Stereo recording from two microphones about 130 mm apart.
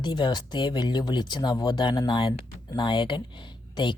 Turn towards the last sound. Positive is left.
turn(degrees=35)  # may be behind; listen again after turning